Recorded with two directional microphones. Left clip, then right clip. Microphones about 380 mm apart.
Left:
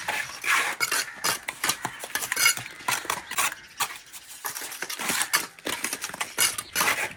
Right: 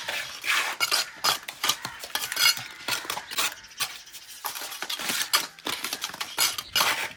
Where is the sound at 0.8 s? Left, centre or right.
Centre.